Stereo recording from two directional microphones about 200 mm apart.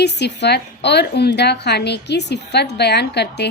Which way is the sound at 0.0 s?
55° left (ahead or behind).